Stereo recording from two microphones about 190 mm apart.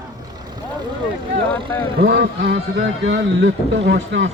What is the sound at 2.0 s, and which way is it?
Speech, 60° right (ahead or behind).